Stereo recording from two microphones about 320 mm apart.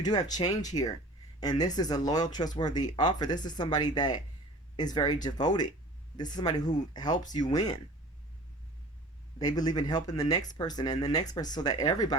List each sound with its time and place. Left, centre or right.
0.0 s speech: centre
9.4 s speech: centre